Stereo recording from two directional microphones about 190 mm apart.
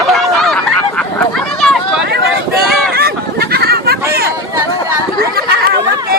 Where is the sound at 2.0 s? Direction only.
55° right (ahead or behind).